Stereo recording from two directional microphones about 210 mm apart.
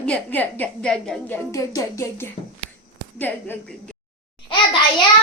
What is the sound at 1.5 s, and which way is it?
A woman's voice, 15° left (ahead or behind).